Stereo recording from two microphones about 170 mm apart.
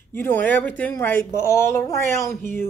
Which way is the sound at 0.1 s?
10° left (ahead or behind).